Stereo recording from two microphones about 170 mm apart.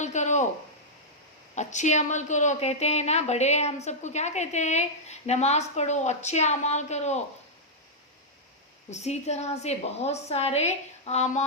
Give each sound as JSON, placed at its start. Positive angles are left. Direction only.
{"t": 0.0, "sound": "a sound", "side_deg": 45}
{"t": 1.5, "sound": "a woman's voice", "side_deg": 45}
{"t": 8.9, "sound": "a woman's voice", "side_deg": 40}